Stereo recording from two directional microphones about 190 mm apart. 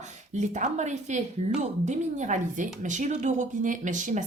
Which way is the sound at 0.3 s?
40° right (ahead or behind).